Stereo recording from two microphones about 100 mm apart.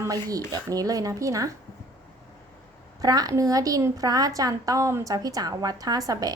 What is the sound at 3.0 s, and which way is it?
A woman's voice, 40° right (ahead or behind).